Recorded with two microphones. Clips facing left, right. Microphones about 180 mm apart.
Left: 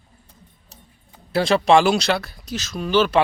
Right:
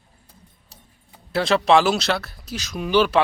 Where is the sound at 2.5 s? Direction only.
15° right (ahead or behind).